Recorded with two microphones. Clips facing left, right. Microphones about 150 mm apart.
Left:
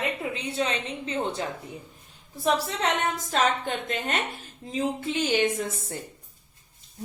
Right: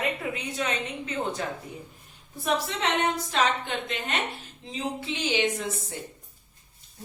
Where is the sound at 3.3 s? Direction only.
45° left (ahead or behind).